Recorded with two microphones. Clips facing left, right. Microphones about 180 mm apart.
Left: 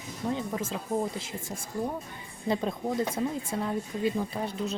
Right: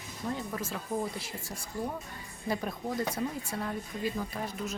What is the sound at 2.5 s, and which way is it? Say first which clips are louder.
Speech: left 4 dB; 25° left (ahead or behind).